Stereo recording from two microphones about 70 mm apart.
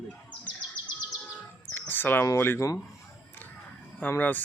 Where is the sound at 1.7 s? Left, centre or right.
Left.